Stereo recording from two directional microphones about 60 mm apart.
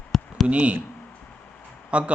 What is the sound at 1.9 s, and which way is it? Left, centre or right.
Speech, right.